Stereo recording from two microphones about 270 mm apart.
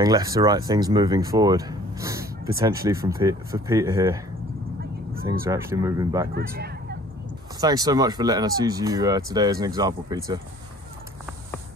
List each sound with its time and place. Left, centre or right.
0.0 s speech: centre
5.2 s speech: centre
6.3 s speech: right
7.6 s speech: centre